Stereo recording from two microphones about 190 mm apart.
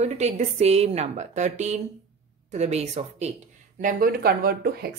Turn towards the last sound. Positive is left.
turn(degrees=-55)  # may be behind; listen again after turning